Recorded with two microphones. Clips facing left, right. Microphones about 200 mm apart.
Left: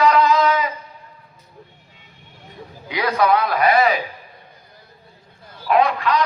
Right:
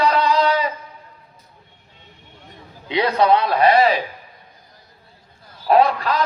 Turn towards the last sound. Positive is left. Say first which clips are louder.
# right 2 dB
turn(degrees=-35)  # may be behind; listen again after turning